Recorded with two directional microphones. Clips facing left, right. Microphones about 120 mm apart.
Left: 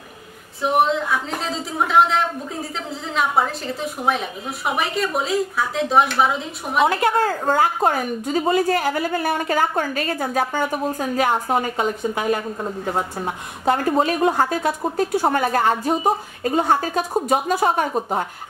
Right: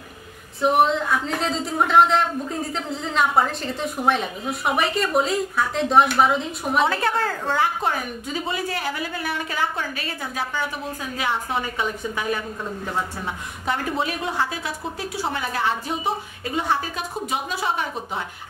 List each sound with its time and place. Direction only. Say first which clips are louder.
0.6 s a woman's voice: even; centre (ahead or behind)
7.2 s a woman's voice: left 4 dB; 45° left (ahead or behind)